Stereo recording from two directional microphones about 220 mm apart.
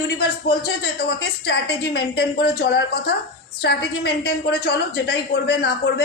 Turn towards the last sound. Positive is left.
turn(degrees=50)  # may be behind; listen again after turning